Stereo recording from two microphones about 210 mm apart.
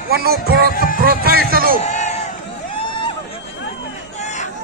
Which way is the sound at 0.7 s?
40° left (ahead or behind).